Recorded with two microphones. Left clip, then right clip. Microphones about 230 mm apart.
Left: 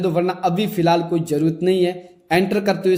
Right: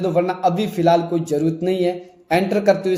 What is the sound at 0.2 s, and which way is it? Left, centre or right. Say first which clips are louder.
Speech: right 4 dB; left.